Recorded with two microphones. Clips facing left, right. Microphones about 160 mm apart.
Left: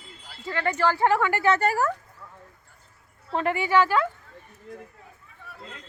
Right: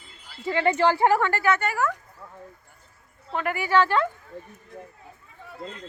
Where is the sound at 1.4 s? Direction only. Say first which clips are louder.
Left 1 dB; 35° left (ahead or behind).